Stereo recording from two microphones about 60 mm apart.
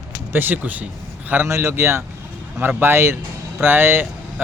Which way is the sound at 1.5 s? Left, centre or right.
Right.